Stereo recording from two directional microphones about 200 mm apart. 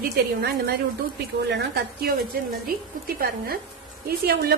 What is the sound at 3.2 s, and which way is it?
A woman's voice, 50° right (ahead or behind).